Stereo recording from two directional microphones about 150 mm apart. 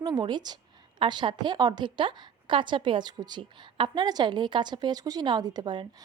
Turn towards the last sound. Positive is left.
turn(degrees=-30)  # may be behind; listen again after turning